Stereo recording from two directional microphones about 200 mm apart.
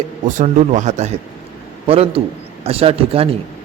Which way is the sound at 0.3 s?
35° right (ahead or behind).